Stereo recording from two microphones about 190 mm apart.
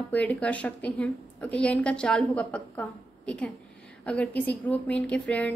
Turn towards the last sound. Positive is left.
turn(degrees=5)  # may be behind; listen again after turning